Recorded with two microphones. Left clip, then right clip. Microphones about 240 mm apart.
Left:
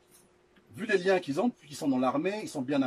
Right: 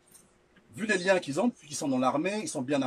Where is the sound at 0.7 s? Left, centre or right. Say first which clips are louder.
Right 1 dB; right.